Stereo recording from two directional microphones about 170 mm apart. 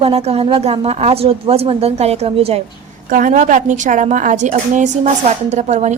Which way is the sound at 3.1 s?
50° right (ahead or behind).